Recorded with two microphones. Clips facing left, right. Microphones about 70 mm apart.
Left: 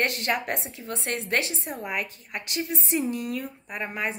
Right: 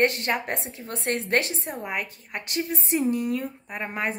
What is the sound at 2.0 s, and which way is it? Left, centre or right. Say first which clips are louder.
A woman's voice: right 1 dB; right.